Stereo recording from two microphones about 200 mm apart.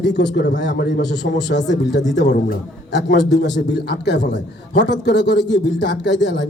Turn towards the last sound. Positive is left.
turn(degrees=60)  # may be behind; listen again after turning